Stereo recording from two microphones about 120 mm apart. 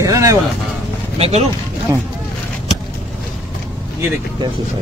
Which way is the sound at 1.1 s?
55° right (ahead or behind).